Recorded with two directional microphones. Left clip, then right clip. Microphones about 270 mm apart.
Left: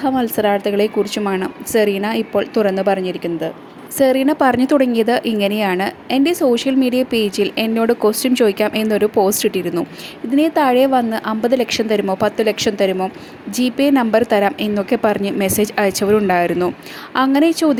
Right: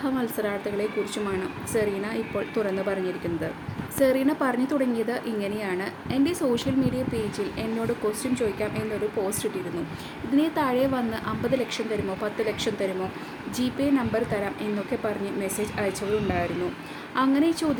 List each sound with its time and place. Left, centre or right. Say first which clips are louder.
0.0 s a woman's voice: left 11 dB; left
10.3 s a woman's voice: left 10 dB; left